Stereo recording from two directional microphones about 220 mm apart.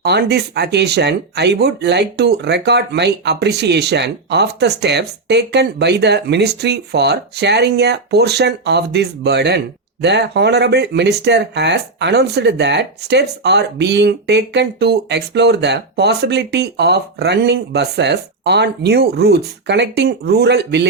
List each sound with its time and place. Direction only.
0.0 s speech: 50° right (ahead or behind)